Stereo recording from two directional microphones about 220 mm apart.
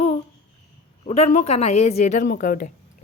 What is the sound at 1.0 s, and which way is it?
A woman's voice, 30° left (ahead or behind).